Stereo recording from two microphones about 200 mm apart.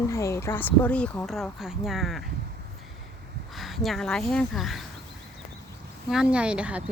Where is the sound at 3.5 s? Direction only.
Centre (ahead or behind).